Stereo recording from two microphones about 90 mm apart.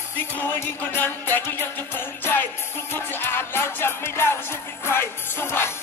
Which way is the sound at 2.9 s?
25° left (ahead or behind).